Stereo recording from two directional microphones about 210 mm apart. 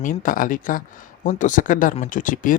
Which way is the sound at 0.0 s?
40° left (ahead or behind).